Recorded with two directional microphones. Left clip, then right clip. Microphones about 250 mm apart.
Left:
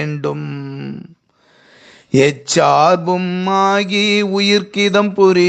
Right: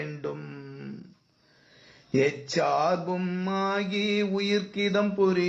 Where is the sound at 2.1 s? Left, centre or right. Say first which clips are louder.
Left 12 dB; left.